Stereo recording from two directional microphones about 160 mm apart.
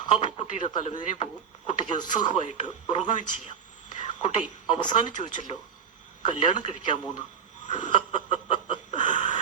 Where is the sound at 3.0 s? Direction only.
50° left (ahead or behind).